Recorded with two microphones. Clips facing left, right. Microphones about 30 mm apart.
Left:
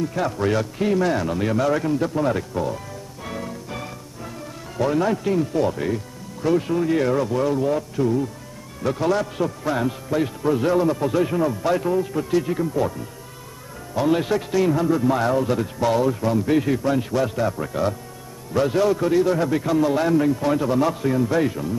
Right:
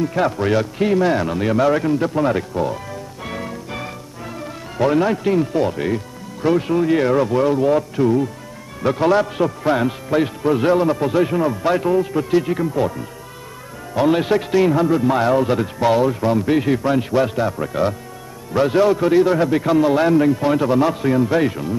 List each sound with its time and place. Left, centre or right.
0.0 s a man's voice: right